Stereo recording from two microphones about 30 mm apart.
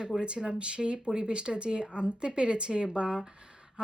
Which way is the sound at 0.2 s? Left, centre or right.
Right.